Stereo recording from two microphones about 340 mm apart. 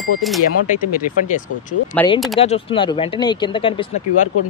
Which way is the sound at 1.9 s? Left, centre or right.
Centre.